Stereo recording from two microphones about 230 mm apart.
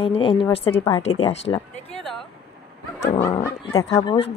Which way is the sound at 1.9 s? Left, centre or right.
Centre.